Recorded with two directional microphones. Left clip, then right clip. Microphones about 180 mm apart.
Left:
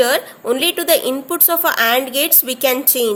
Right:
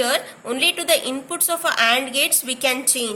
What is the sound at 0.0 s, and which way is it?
A woman's voice, 50° left (ahead or behind).